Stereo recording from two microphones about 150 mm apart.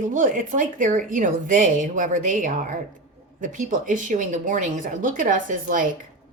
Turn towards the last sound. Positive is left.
turn(degrees=-65)  # may be behind; listen again after turning